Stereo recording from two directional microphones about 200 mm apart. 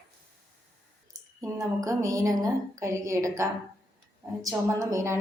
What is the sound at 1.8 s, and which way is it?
A woman's voice, 15° right (ahead or behind).